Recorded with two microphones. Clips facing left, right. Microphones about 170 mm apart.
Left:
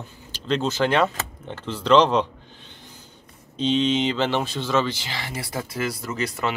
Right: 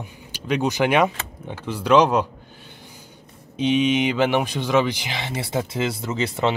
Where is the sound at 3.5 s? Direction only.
10° right (ahead or behind).